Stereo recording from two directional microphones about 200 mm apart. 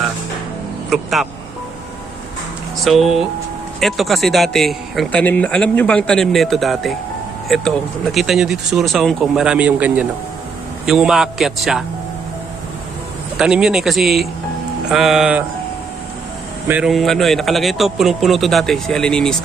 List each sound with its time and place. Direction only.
0.9 s speech: centre (ahead or behind)
2.8 s a man's voice: centre (ahead or behind)
13.3 s a man's voice: 5° right (ahead or behind)
16.6 s a man's voice: 5° right (ahead or behind)